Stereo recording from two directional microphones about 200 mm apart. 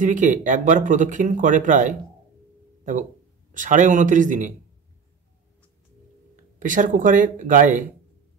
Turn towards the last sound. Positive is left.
turn(degrees=-40)  # may be behind; listen again after turning